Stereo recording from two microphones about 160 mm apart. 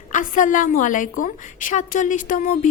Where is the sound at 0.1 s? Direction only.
55° left (ahead or behind).